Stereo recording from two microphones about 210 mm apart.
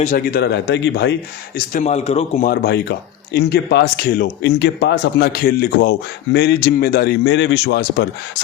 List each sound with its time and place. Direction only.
0.0 s speech: 40° left (ahead or behind); by 1.1 s 55° left (ahead or behind)
1.5 s speech: 35° left (ahead or behind)
2.5 s speech: 50° left (ahead or behind)